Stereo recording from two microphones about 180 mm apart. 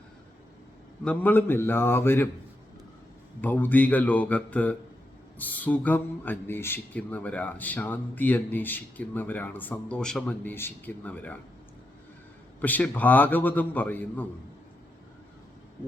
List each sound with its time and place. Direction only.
1.0 s speech: 10° left (ahead or behind)
3.4 s speech: 10° left (ahead or behind)
12.5 s speech: 10° left (ahead or behind)